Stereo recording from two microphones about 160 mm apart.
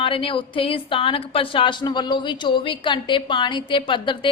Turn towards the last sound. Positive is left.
turn(degrees=30)  # may be behind; listen again after turning